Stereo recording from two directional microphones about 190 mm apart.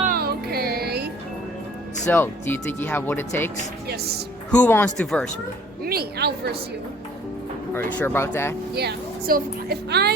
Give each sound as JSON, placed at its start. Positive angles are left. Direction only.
{"t": 0.0, "sound": "music", "side_deg": -50}
{"t": 2.0, "sound": "speech", "side_deg": 10}
{"t": 4.5, "sound": "speech", "side_deg": 10}
{"t": 5.8, "sound": "speech", "side_deg": -55}
{"t": 7.7, "sound": "speech", "side_deg": 10}
{"t": 8.7, "sound": "speech", "side_deg": -60}